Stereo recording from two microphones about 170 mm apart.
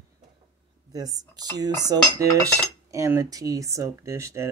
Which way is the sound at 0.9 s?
20° right (ahead or behind).